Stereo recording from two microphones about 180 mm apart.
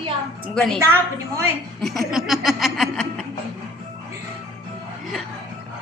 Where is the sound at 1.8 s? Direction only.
Centre (ahead or behind).